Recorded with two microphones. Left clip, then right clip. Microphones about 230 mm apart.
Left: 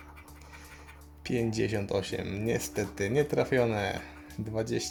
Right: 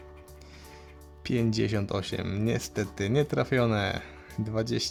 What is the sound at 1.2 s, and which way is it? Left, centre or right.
Speech, right.